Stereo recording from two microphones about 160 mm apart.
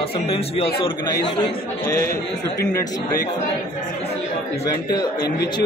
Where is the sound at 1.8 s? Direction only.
15° left (ahead or behind).